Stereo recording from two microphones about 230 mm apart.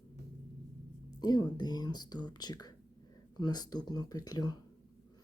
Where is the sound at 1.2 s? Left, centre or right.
Centre.